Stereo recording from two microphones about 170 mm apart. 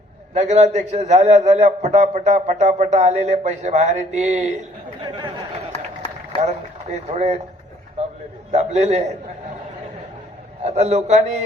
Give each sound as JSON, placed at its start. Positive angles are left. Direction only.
{"t": 0.3, "sound": "a man's voice", "side_deg": -40}
{"t": 6.9, "sound": "a man's voice", "side_deg": -40}
{"t": 8.5, "sound": "a man's voice", "side_deg": -40}
{"t": 10.6, "sound": "a man's voice", "side_deg": -40}